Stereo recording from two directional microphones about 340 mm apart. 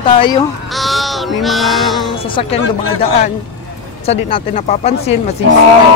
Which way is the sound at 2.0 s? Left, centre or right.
Centre.